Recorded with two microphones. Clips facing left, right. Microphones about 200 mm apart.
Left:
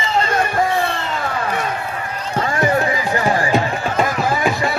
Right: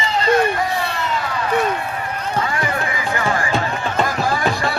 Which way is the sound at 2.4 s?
40° left (ahead or behind).